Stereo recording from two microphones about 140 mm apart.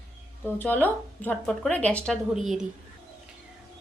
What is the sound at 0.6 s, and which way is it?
Speech, 15° left (ahead or behind).